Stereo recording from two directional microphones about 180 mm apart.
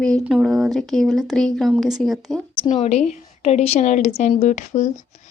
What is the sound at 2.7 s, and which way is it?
A woman's voice, 35° left (ahead or behind).